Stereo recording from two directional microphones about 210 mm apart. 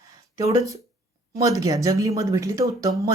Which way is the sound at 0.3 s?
15° right (ahead or behind).